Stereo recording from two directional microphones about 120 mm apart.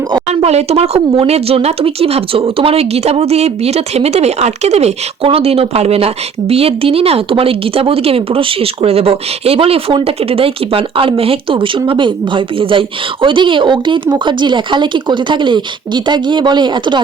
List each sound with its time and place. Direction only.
0.3 s speech: 60° right (ahead or behind); by 17.0 s 40° right (ahead or behind)